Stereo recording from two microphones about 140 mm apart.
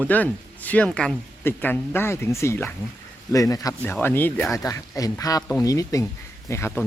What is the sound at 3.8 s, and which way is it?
Speech, 15° left (ahead or behind).